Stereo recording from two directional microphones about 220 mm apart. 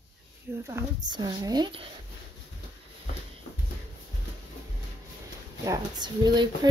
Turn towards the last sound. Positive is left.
turn(degrees=-20)  # may be behind; listen again after turning